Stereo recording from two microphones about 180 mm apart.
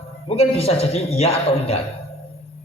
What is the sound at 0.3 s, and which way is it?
A man's voice, 35° left (ahead or behind).